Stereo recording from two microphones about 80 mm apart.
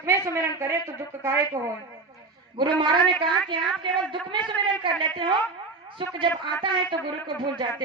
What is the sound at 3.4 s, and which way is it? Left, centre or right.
A man's voice, right.